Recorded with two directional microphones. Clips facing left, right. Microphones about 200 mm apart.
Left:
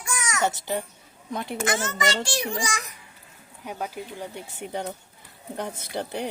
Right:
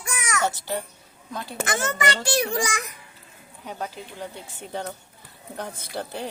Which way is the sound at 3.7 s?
10° left (ahead or behind).